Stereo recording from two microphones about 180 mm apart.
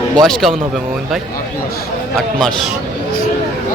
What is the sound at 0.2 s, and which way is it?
Speech, centre (ahead or behind).